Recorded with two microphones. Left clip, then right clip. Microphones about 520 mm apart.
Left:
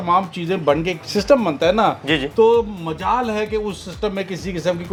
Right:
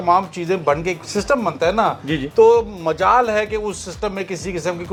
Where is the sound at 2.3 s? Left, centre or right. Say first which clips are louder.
Right 3 dB; right.